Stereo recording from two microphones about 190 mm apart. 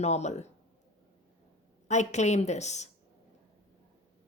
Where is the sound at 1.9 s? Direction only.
40° left (ahead or behind).